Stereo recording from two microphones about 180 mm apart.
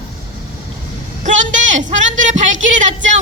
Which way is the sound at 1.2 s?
45° right (ahead or behind).